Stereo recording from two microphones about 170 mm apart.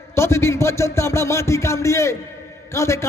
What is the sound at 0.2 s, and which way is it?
A man's voice, 15° left (ahead or behind).